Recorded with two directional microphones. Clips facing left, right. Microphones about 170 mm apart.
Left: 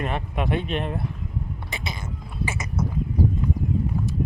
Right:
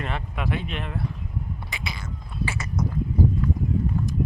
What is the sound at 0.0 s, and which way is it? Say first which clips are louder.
Speech: left 3 dB; 20° left (ahead or behind).